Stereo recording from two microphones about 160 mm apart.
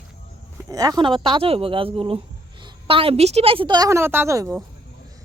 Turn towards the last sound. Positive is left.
turn(degrees=-20)  # may be behind; listen again after turning